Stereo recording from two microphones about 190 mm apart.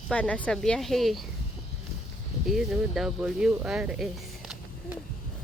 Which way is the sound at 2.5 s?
Centre (ahead or behind).